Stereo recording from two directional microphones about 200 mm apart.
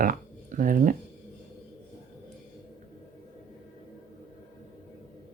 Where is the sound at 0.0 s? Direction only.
45° right (ahead or behind).